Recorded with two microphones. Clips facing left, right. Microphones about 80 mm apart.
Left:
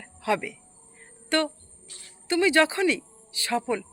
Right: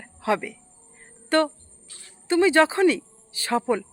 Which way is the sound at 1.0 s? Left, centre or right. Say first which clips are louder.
Right 4 dB; right.